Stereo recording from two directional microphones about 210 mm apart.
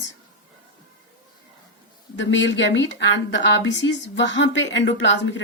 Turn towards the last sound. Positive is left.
turn(degrees=60)  # may be behind; listen again after turning